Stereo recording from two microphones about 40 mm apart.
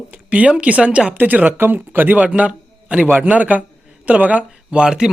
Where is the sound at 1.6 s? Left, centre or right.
Right.